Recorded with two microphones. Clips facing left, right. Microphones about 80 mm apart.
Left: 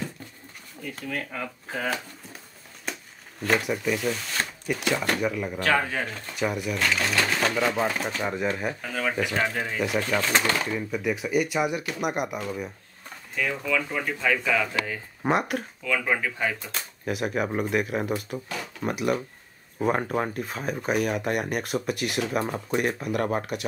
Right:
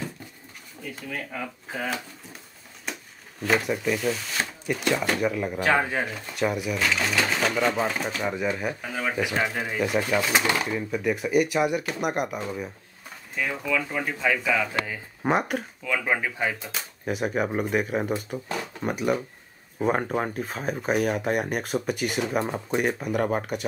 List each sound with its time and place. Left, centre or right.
1.0 s speech: centre
5.6 s speech: centre
6.0 s speech: centre
13.3 s speech: centre
15.8 s speech: centre
16.5 s speech: centre
22.4 s speech: centre
22.8 s speech: centre